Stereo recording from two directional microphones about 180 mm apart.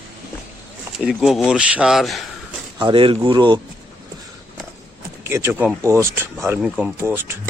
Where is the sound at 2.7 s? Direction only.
25° right (ahead or behind).